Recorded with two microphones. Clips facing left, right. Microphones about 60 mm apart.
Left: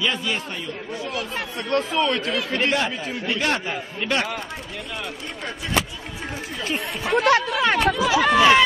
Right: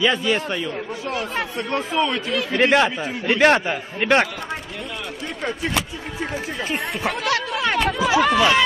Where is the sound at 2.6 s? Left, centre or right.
Right.